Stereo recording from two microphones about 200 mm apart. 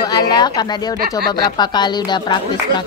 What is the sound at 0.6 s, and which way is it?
Speech, 20° left (ahead or behind).